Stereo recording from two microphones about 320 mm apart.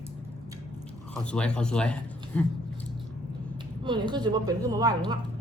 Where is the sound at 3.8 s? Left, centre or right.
Centre.